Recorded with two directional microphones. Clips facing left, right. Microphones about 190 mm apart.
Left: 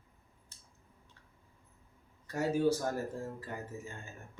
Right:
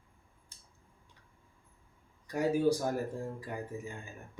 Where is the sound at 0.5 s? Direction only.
10° right (ahead or behind).